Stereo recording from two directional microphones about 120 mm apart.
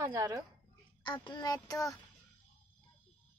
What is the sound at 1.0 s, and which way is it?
Speech, 40° left (ahead or behind).